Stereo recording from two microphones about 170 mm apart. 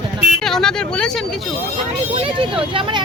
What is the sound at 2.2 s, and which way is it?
Speech, 30° right (ahead or behind).